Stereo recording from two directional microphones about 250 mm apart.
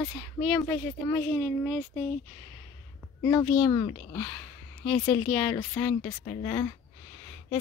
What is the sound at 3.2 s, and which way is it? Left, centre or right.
Speech, centre.